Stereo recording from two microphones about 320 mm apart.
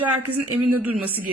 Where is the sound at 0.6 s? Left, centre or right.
Centre.